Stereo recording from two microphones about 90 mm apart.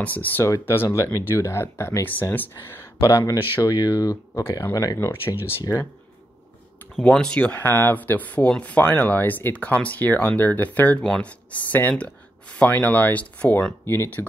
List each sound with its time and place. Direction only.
0.0 s speech: 20° left (ahead or behind)
3.3 s speech: 45° left (ahead or behind)
4.9 s speech: 25° left (ahead or behind)
7.0 s speech: 10° left (ahead or behind)
13.8 s speech: 25° left (ahead or behind)